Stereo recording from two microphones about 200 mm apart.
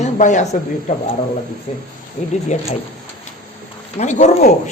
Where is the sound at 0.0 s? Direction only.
35° left (ahead or behind).